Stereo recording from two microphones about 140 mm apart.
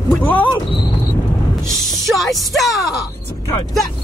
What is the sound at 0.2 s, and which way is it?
Vehicle, 15° left (ahead or behind).